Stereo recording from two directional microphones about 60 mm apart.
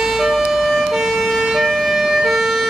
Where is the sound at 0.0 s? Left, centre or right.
Centre.